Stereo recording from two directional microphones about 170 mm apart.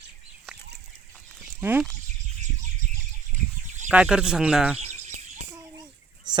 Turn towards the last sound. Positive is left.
turn(degrees=-25)  # may be behind; listen again after turning